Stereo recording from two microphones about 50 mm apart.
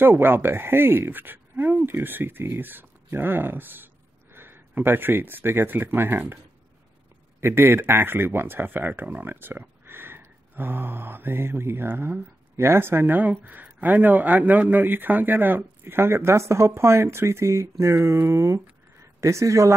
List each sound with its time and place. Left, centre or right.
0.0 s speech: right
15.8 s speech: right